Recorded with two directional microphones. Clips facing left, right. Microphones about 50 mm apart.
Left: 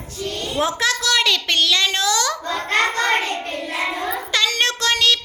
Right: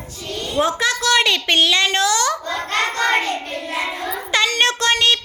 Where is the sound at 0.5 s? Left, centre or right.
Centre.